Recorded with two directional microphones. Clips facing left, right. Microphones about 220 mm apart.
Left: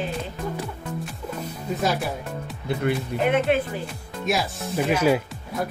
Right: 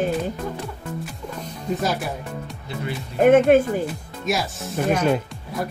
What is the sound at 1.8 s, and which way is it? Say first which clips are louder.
Speech: left 2 dB; centre (ahead or behind).